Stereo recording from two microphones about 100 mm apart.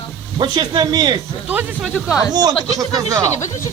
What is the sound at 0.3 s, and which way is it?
Speech, 45° right (ahead or behind).